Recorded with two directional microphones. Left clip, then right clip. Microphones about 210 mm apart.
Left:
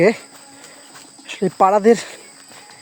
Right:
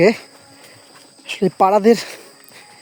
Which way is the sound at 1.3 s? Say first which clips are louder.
Even; 25° right (ahead or behind).